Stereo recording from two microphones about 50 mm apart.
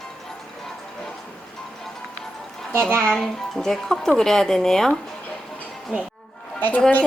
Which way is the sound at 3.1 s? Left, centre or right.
Centre.